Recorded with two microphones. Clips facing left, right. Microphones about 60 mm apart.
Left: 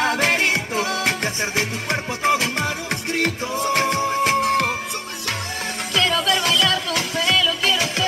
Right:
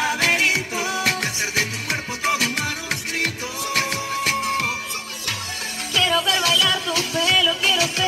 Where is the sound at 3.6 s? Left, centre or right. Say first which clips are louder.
Left 4 dB; left.